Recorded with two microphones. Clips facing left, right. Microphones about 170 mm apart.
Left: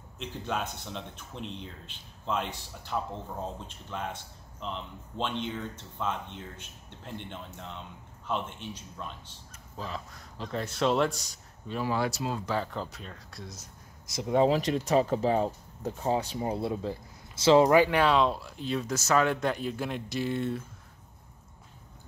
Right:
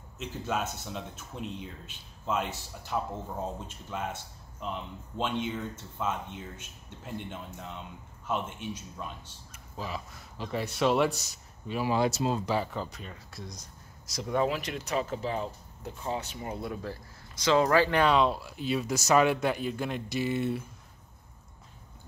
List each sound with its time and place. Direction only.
0.2 s speech: 5° right (ahead or behind); by 12.4 s 25° right (ahead or behind)
12.4 s speech: 10° right (ahead or behind)
14.0 s speech: 20° left (ahead or behind)
14.5 s speech: 35° left (ahead or behind); by 17.9 s 15° left (ahead or behind)
17.9 s speech: centre (ahead or behind)